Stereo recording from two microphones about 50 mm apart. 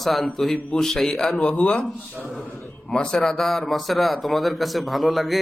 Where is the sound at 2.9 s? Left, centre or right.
Centre.